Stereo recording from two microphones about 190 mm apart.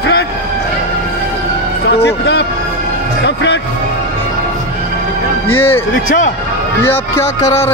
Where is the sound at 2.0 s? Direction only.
65° left (ahead or behind).